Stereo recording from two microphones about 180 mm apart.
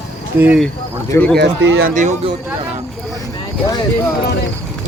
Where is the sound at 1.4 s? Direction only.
90° right.